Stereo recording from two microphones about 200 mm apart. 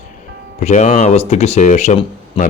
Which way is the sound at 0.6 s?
35° left (ahead or behind).